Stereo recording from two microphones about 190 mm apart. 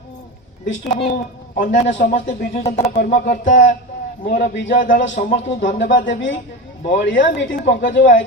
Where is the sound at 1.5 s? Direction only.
50° left (ahead or behind).